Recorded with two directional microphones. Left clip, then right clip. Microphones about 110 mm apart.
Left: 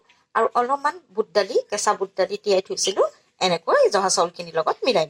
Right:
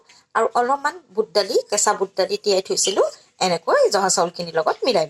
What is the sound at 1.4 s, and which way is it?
Speech, 35° right (ahead or behind).